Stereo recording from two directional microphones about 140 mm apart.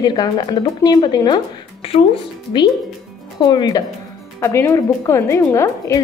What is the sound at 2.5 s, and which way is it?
A woman's voice, 35° left (ahead or behind).